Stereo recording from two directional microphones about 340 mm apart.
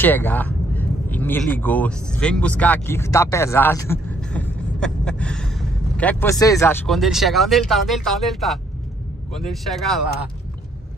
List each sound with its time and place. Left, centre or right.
0.0 s speech: centre